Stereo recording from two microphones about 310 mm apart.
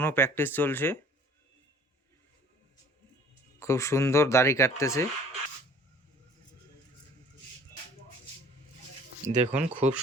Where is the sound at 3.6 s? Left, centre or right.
Centre.